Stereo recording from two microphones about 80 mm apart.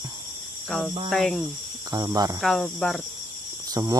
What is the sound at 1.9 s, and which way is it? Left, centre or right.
Speech, right.